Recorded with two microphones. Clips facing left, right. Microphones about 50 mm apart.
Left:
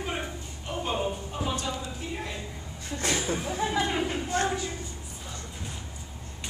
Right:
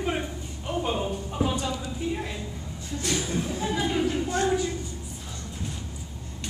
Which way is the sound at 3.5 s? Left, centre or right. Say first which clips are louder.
Even; left.